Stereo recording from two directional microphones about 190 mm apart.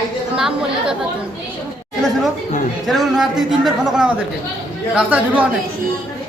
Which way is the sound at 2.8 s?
Centre (ahead or behind).